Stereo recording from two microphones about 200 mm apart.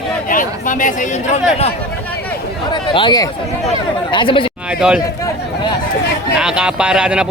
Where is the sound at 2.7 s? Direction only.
25° left (ahead or behind).